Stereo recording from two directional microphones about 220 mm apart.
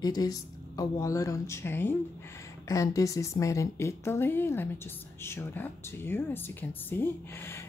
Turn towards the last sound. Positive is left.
turn(degrees=10)  # may be behind; listen again after turning